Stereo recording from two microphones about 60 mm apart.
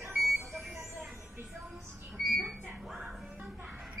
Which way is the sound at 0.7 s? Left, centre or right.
Right.